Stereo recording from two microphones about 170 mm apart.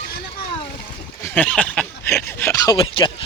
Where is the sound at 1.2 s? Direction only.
10° left (ahead or behind).